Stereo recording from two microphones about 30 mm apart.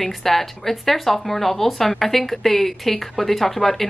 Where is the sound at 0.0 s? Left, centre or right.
Centre.